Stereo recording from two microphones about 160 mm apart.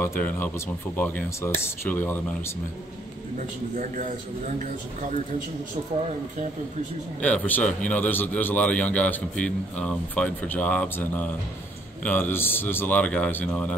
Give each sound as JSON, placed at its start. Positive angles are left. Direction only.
{"t": 0.9, "sound": "a man's voice", "side_deg": 10}
{"t": 3.7, "sound": "a man's voice", "side_deg": -55}
{"t": 7.2, "sound": "a man's voice", "side_deg": 10}